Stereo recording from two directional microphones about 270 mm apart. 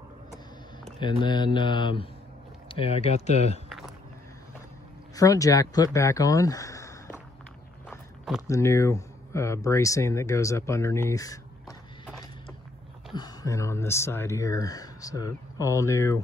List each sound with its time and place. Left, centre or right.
0.9 s speech: centre
5.1 s speech: centre
13.1 s speech: centre